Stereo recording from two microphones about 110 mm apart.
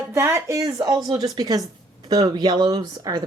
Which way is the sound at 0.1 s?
25° right (ahead or behind).